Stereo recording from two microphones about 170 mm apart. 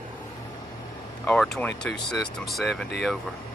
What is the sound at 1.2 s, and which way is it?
Speech, 5° left (ahead or behind).